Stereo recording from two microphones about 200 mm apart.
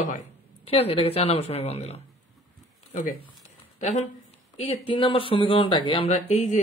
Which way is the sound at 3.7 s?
35° left (ahead or behind).